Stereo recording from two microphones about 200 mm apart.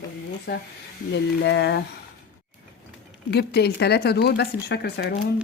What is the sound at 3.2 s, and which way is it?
Speech, 55° left (ahead or behind).